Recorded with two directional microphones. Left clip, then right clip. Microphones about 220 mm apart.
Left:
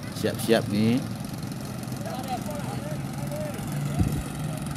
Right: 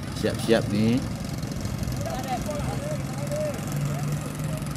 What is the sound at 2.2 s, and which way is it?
Vehicle, 25° right (ahead or behind).